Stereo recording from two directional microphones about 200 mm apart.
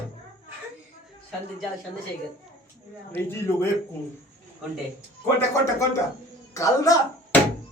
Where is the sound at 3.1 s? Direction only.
10° left (ahead or behind).